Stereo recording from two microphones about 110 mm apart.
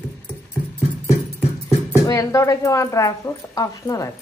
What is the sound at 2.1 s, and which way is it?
A woman's voice, 30° left (ahead or behind).